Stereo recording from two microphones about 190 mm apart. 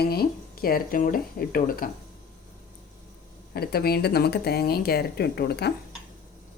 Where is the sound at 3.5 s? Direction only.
55° left (ahead or behind).